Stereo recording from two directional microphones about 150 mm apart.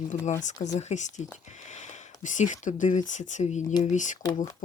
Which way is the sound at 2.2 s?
55° left (ahead or behind).